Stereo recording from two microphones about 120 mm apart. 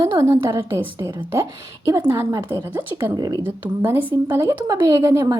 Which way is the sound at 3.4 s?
20° right (ahead or behind).